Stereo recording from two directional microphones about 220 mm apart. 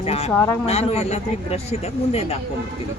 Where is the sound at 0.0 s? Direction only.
30° left (ahead or behind).